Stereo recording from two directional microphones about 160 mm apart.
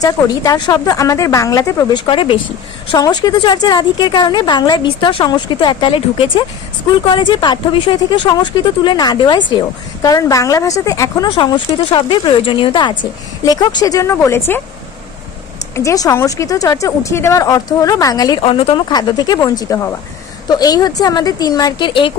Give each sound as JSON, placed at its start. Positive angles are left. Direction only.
{"t": 0.0, "sound": "speech", "side_deg": 25}
{"t": 2.0, "sound": "speech", "side_deg": 35}
{"t": 11.3, "sound": "speech", "side_deg": 30}
{"t": 15.7, "sound": "speech", "side_deg": 20}